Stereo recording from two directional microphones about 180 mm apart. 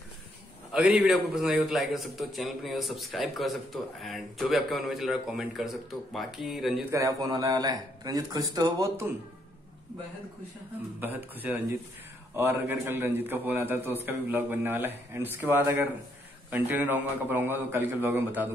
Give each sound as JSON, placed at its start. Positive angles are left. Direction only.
{"t": 0.7, "sound": "a man's voice", "side_deg": -5}
{"t": 6.9, "sound": "speech", "side_deg": -20}
{"t": 11.0, "sound": "a man's voice", "side_deg": -10}